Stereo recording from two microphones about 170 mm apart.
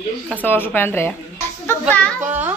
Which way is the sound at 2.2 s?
10° right (ahead or behind).